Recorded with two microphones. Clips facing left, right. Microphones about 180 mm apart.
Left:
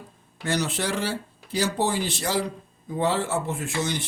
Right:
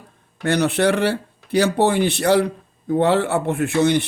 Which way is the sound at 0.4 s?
60° right (ahead or behind).